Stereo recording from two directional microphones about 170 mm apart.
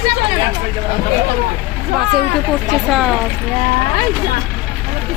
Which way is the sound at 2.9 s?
Centre (ahead or behind).